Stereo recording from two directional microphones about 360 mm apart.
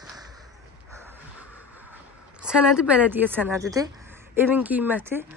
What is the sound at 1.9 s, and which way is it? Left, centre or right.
A woman's voice, centre.